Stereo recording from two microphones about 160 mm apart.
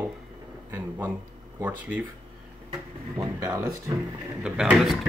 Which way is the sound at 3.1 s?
20° right (ahead or behind).